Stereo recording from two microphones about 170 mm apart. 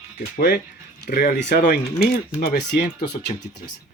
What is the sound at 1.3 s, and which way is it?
Speech, 75° left (ahead or behind).